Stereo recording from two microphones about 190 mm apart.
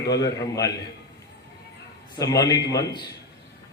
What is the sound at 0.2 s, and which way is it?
Speech, 20° left (ahead or behind).